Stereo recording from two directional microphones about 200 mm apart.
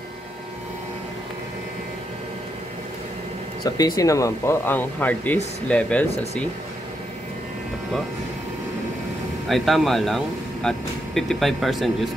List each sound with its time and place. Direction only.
3.6 s speech: 20° left (ahead or behind)
9.5 s speech: centre (ahead or behind)